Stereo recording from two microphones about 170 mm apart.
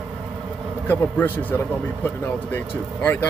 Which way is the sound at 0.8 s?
10° left (ahead or behind).